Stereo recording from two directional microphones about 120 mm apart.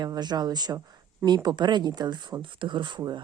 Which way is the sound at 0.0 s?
35° right (ahead or behind).